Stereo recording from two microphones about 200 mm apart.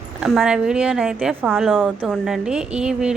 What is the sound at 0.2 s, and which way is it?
A woman's voice, 5° right (ahead or behind).